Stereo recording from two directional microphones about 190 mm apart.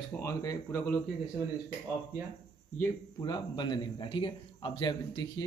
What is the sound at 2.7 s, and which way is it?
A man's voice, 15° left (ahead or behind).